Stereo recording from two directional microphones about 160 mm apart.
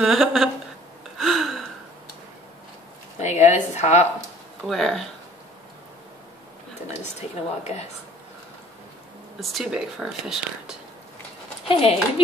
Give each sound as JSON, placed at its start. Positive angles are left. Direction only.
{"t": 0.0, "sound": "speech", "side_deg": 0}
{"t": 1.1, "sound": "gasp", "side_deg": 0}
{"t": 3.2, "sound": "speech", "side_deg": 45}
{"t": 4.6, "sound": "speech", "side_deg": 0}
{"t": 7.2, "sound": "speech", "side_deg": 45}
{"t": 9.4, "sound": "speech", "side_deg": 0}
{"t": 11.6, "sound": "speech", "side_deg": 35}